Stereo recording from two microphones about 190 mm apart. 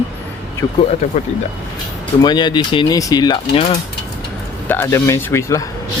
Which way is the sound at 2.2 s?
25° left (ahead or behind).